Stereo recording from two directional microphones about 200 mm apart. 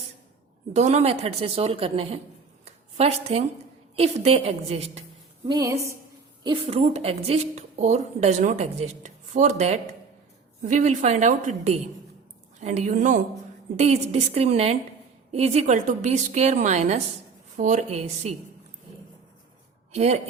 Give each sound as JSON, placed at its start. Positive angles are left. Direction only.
{"t": 0.7, "sound": "a woman's voice", "side_deg": -35}
{"t": 2.6, "sound": "a sound", "side_deg": -30}
{"t": 3.9, "sound": "a woman's voice", "side_deg": -30}
{"t": 5.5, "sound": "a woman's voice", "side_deg": -15}
{"t": 6.4, "sound": "a woman's voice", "side_deg": -25}
{"t": 19.9, "sound": "speech", "side_deg": -35}